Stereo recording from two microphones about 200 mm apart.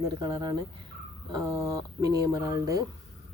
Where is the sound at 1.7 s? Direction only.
15° right (ahead or behind).